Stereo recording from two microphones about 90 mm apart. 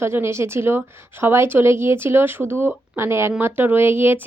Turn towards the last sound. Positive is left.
turn(degrees=-25)  # may be behind; listen again after turning